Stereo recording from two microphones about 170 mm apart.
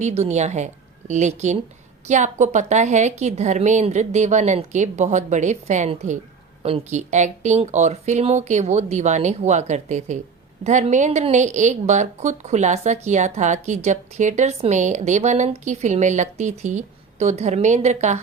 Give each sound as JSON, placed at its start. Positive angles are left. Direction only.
{"t": 0.0, "sound": "a woman's voice", "side_deg": -40}